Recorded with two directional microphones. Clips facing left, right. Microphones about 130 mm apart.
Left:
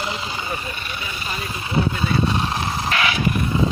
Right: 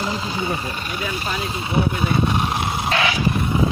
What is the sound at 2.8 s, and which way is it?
Dog, 30° right (ahead or behind).